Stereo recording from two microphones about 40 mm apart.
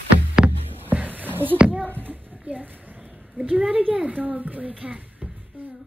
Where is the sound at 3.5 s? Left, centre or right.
Right.